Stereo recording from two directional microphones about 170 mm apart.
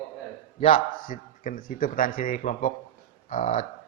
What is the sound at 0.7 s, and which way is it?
A man's voice, 50° left (ahead or behind).